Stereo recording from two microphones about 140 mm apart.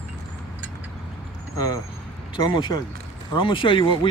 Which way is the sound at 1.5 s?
25° left (ahead or behind).